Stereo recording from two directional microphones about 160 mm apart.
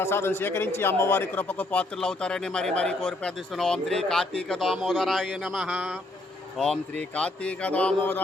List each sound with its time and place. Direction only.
0.0 s a man's voice: 15° left (ahead or behind)